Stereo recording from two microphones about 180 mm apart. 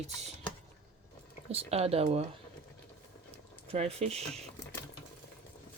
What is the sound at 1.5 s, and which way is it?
Speech, 35° right (ahead or behind).